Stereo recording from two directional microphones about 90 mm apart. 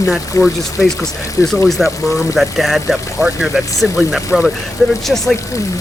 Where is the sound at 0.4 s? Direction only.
35° left (ahead or behind).